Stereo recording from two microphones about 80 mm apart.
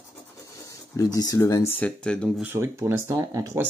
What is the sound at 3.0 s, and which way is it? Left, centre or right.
Speech, right.